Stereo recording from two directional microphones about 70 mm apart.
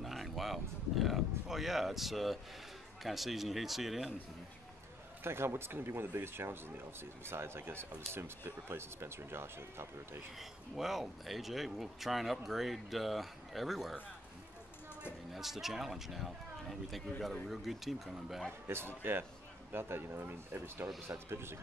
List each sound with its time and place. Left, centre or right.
0.0 s speech: centre
5.2 s speech: right
10.8 s speech: centre
15.3 s speech: centre
18.7 s speech: right